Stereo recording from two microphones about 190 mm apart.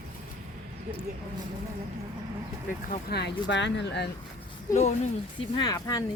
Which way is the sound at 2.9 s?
55° left (ahead or behind).